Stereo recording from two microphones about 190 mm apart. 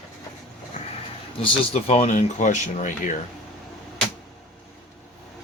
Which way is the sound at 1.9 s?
35° left (ahead or behind).